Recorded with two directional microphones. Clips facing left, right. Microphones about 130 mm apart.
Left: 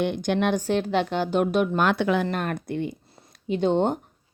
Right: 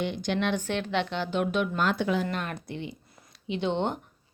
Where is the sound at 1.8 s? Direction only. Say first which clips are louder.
Left 4 dB; 70° left (ahead or behind).